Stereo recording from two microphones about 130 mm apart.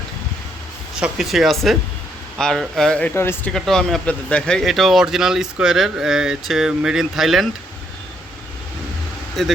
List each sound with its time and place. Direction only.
0.9 s speech: 5° right (ahead or behind)
3.2 s speech: 20° left (ahead or behind)
3.5 s speech: 5° left (ahead or behind)
9.4 s speech: 5° left (ahead or behind)